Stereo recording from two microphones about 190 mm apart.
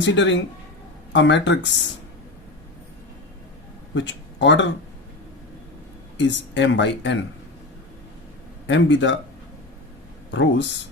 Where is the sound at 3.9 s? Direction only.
70° left (ahead or behind).